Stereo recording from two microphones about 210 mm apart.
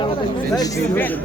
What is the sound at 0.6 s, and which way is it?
Speech, 10° left (ahead or behind).